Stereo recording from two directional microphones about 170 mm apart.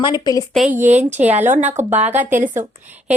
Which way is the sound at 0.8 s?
45° right (ahead or behind).